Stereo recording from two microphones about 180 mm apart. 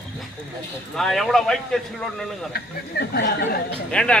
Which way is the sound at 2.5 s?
60° left (ahead or behind).